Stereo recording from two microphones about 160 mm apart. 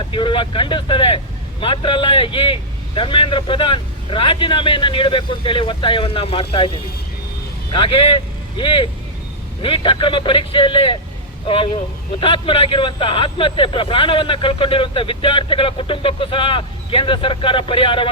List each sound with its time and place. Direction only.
0.1 s speech: 30° left (ahead or behind)
7.7 s speech: 30° left (ahead or behind)